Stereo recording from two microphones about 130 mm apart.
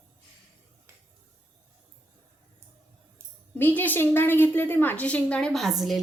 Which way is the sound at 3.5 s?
15° left (ahead or behind).